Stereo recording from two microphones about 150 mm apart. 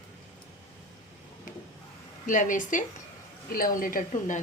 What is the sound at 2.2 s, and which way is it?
A woman's voice, 60° left (ahead or behind).